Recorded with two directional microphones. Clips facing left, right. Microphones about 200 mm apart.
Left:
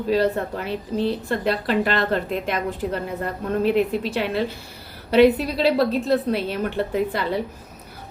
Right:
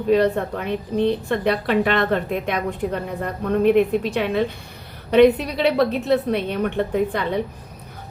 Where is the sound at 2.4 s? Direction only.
60° right (ahead or behind).